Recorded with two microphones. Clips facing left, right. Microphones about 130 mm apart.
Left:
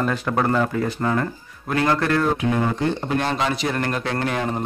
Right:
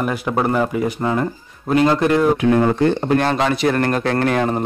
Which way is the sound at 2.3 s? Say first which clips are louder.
Right 7 dB; 60° right (ahead or behind).